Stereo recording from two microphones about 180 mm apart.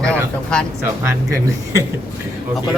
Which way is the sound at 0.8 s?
15° right (ahead or behind).